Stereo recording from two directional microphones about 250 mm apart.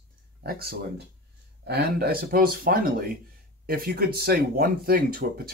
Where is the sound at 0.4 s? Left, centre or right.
Right.